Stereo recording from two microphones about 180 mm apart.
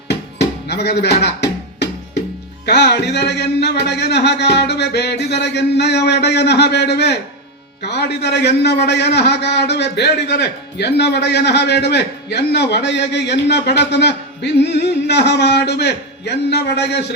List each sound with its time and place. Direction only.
0.7 s music: 65° left (ahead or behind)
2.6 s a man's voice: 65° left (ahead or behind)